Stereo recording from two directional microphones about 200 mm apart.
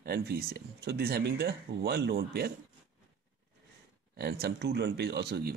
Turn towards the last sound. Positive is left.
turn(degrees=-55)  # may be behind; listen again after turning